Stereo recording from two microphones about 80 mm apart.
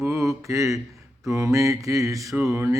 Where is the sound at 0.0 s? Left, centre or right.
Right.